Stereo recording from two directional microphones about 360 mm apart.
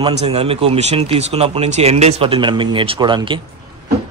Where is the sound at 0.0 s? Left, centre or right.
Centre.